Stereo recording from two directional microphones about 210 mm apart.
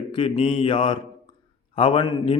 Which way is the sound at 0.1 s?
25° left (ahead or behind).